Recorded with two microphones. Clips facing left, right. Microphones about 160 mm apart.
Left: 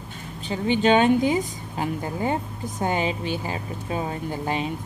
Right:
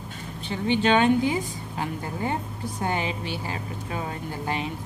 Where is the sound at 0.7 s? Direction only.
15° left (ahead or behind).